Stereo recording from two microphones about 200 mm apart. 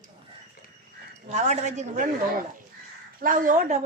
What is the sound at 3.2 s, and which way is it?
Speech, 45° right (ahead or behind).